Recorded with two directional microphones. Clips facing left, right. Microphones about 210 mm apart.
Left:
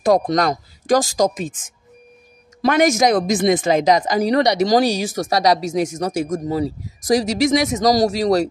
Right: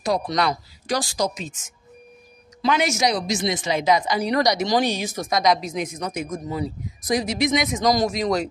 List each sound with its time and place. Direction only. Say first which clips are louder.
0.0 s a woman's voice: left 6 dB; 50° left (ahead or behind)
7.0 s speech: left 5 dB; 85° left
7.5 s speech: left 4 dB; 35° left (ahead or behind)